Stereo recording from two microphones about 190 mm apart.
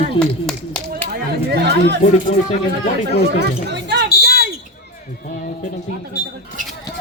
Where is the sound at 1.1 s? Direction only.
60° right (ahead or behind).